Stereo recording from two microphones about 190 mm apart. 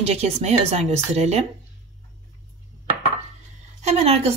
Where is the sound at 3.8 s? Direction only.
35° right (ahead or behind).